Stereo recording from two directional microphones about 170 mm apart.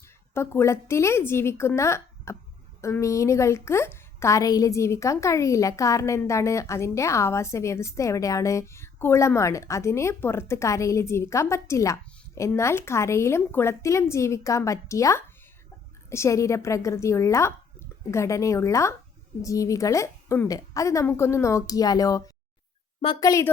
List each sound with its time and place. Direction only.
0.0 s a woman's voice: 15° left (ahead or behind)
23.2 s a woman's voice: 20° left (ahead or behind)